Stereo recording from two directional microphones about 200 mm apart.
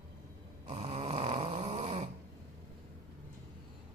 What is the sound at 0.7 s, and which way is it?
Snoring, 30° right (ahead or behind).